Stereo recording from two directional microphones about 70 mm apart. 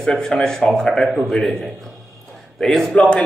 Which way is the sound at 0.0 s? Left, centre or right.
Centre.